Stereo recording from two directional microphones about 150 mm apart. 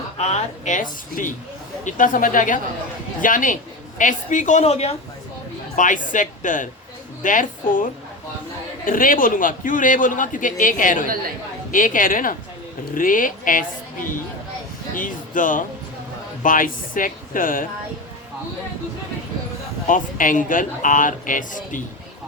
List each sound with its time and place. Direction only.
0.2 s a man's voice: 50° left (ahead or behind)
5.7 s a man's voice: 60° left (ahead or behind)
8.9 s a man's voice: 65° left (ahead or behind)
19.9 s a man's voice: 60° left (ahead or behind)